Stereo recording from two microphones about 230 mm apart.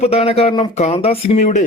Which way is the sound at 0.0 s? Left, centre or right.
Left.